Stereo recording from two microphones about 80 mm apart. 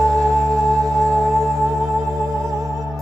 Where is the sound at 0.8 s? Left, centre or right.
Right.